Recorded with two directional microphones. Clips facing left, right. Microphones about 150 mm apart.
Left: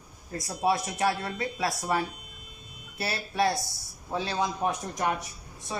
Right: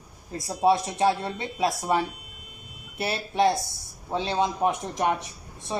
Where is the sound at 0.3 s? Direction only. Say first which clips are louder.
Right 5 dB; 25° right (ahead or behind).